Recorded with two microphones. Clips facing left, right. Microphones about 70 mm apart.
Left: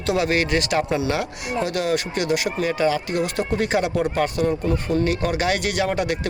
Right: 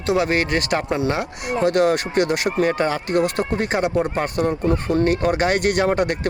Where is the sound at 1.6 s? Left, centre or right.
Right.